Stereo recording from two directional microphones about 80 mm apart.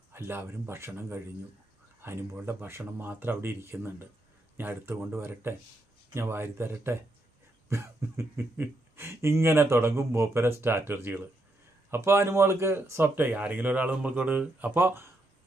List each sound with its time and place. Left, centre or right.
0.1 s speech: right
2.0 s speech: right